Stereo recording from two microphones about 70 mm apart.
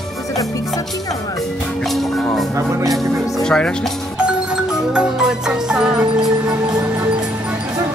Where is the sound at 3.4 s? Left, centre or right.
Centre.